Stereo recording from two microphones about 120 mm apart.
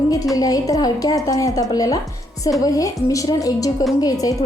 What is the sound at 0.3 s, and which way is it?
A woman's voice, 30° left (ahead or behind).